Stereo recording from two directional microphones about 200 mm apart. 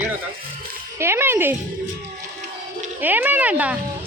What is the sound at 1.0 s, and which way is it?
Speech, 10° right (ahead or behind).